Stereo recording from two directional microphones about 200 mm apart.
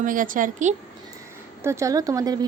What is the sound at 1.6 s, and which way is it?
Speech, 15° right (ahead or behind).